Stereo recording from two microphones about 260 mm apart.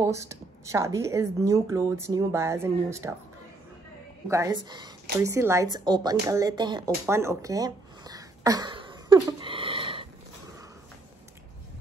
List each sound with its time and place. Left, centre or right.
0.0 s speech: centre
4.3 s speech: centre